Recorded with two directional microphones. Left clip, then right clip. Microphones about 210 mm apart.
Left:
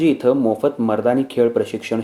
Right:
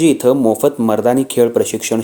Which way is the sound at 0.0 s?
35° right (ahead or behind).